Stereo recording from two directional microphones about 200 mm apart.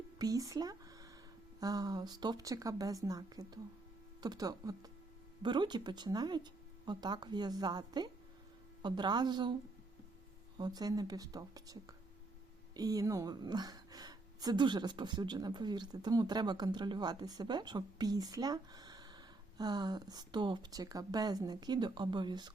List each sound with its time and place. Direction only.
0.2 s a woman's voice: 15° right (ahead or behind)
10.6 s a woman's voice: 20° right (ahead or behind)